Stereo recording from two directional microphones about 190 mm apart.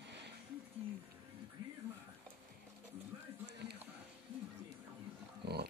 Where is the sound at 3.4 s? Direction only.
60° right (ahead or behind).